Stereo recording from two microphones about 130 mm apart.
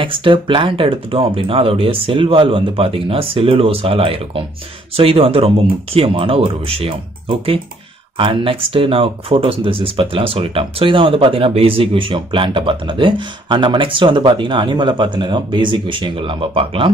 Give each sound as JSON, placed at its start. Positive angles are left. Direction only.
{"t": 0.0, "sound": "speech", "side_deg": -40}